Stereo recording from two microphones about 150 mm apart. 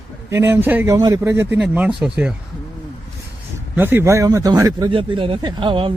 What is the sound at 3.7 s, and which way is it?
A man's voice, 15° right (ahead or behind).